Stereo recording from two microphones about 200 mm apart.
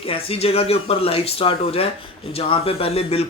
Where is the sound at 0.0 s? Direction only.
30° left (ahead or behind).